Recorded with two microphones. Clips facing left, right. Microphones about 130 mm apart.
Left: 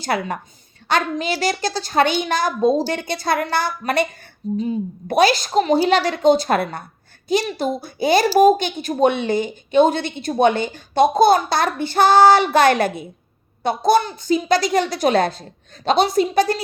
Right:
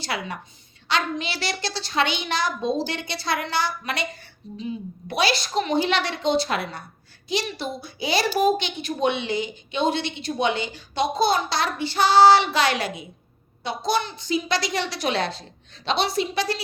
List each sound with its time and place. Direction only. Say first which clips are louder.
0.0 s a woman's voice: left 7 dB; 50° left (ahead or behind)